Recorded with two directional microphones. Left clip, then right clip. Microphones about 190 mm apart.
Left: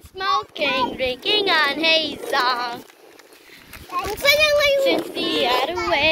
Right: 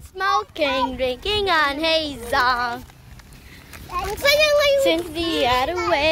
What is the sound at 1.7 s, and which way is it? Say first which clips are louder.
Child singing: left 2 dB; 20° right (ahead or behind).